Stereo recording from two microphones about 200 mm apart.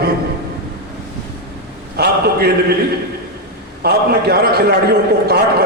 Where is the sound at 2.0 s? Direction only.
50° right (ahead or behind).